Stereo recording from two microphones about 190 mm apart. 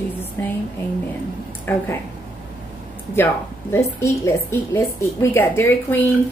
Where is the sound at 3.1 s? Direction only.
10° left (ahead or behind).